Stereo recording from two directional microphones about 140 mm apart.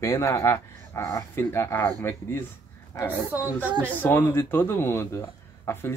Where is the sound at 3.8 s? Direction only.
15° left (ahead or behind).